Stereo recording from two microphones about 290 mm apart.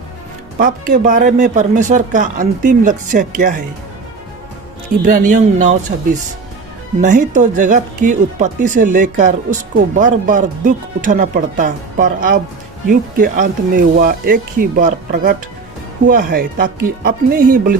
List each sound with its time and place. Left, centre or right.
0.6 s speech: right
5.0 s speech: right